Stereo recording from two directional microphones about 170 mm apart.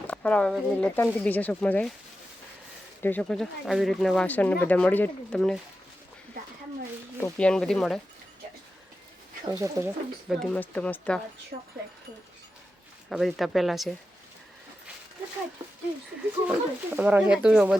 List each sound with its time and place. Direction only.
0.1 s speech: 10° left (ahead or behind)
3.0 s speech: 10° left (ahead or behind)
7.2 s speech: 10° left (ahead or behind)
9.6 s speech: 15° right (ahead or behind)
10.2 s speech: 5° left (ahead or behind)
13.1 s speech: centre (ahead or behind)
16.5 s speech: 10° right (ahead or behind)